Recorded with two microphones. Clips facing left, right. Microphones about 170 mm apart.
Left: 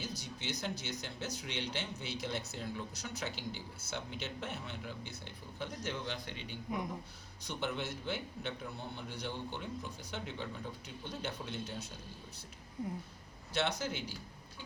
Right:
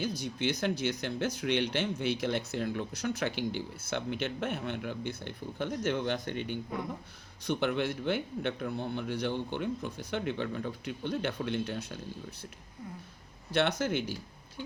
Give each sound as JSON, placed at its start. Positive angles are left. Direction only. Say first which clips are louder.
{"t": 0.0, "sound": "speech", "louder": "right 11 dB", "side_deg": -55}
{"t": 13.5, "sound": "speech", "louder": "right 7 dB", "side_deg": -55}